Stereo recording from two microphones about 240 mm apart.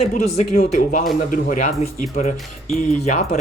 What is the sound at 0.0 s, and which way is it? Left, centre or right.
Speech, left.